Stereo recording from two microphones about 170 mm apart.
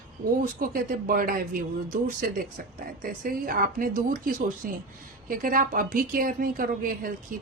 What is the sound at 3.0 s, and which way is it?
A woman's voice, 55° right (ahead or behind).